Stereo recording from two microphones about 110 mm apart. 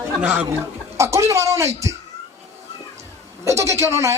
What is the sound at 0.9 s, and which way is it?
Speech, 25° right (ahead or behind).